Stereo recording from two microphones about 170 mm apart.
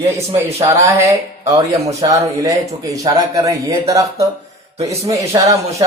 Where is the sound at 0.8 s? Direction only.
15° right (ahead or behind).